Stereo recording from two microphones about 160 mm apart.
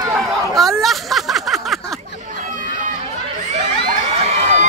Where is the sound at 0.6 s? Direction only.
Centre (ahead or behind).